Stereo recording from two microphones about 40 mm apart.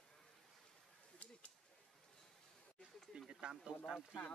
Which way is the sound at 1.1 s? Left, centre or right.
Left.